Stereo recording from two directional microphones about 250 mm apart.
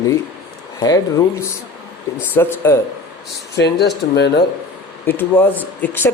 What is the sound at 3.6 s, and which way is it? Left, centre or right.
Speech, left.